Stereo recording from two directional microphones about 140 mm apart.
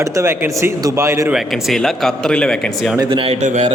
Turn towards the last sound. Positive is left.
turn(degrees=-55)  # may be behind; listen again after turning